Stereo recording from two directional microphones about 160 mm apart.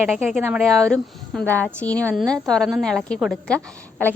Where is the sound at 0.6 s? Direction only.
20° right (ahead or behind).